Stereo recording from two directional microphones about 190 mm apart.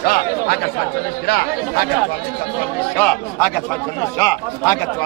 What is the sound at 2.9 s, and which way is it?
Speech, 10° left (ahead or behind).